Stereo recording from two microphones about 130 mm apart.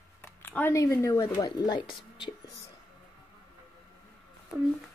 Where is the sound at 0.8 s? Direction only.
20° left (ahead or behind).